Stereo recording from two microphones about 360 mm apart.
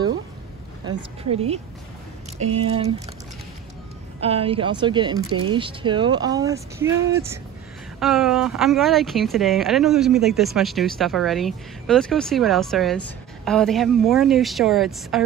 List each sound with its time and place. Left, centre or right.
0.8 s speech: centre
4.2 s speech: centre